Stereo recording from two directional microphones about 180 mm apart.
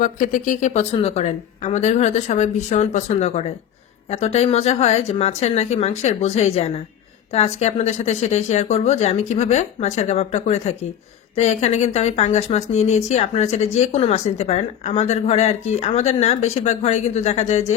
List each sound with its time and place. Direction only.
0.0 s speech: 50° left (ahead or behind)